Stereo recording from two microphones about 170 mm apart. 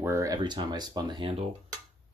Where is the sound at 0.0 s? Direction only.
15° right (ahead or behind).